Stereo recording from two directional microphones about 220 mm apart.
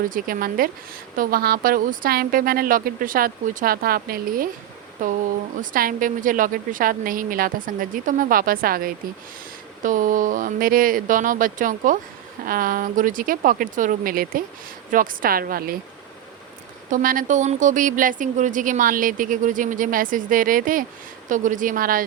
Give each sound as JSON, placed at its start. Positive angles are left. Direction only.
{"t": 0.1, "sound": "speech", "side_deg": -40}
{"t": 16.9, "sound": "speech", "side_deg": -40}